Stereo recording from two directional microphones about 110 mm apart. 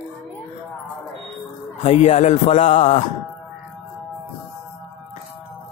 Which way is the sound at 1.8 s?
90° left.